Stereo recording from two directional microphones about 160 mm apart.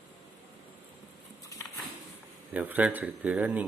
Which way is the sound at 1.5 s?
20° left (ahead or behind).